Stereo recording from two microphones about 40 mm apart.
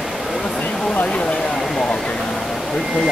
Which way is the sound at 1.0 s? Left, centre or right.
Left.